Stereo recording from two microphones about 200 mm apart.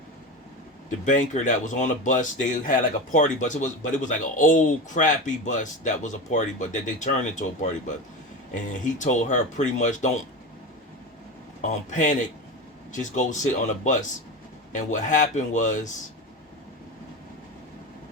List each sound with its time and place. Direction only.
0.9 s speech: 40° left (ahead or behind)
8.7 s speech: 40° left (ahead or behind)
11.6 s speech: 40° left (ahead or behind)